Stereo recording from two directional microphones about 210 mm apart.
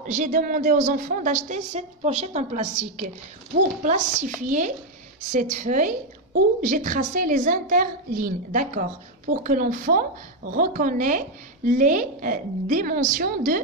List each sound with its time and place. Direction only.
0.0 s a woman's voice: 35° right (ahead or behind)